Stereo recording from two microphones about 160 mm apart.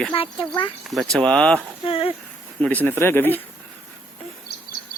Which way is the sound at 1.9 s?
35° left (ahead or behind).